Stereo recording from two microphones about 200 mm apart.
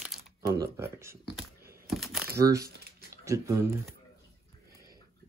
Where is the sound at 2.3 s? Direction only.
15° right (ahead or behind).